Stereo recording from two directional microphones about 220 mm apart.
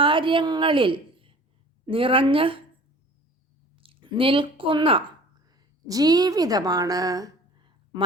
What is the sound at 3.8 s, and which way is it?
A woman's voice, 25° right (ahead or behind).